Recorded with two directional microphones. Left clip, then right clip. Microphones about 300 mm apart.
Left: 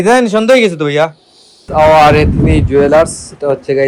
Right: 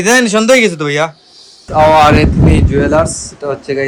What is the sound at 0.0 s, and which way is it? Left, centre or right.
Speech, centre.